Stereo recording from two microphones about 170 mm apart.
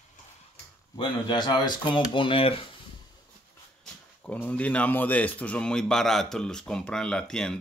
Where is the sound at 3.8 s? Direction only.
10° left (ahead or behind).